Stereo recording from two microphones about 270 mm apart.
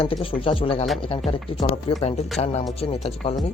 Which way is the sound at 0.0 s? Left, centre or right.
Left.